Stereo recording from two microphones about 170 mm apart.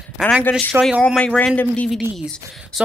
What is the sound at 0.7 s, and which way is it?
Speech, 5° right (ahead or behind).